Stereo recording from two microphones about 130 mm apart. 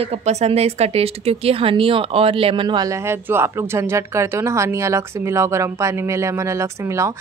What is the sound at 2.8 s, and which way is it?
Speech, 20° right (ahead or behind).